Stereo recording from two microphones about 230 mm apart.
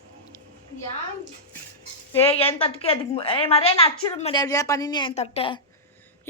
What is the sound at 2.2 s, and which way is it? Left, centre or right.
A woman's voice, left.